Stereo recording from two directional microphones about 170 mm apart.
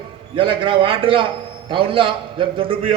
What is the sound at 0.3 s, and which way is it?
A man's voice, 30° right (ahead or behind).